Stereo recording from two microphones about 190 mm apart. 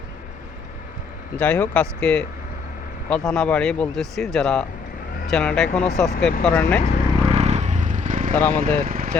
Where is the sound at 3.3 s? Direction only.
5° left (ahead or behind).